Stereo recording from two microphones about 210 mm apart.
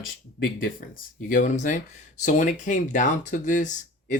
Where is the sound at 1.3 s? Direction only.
40° left (ahead or behind).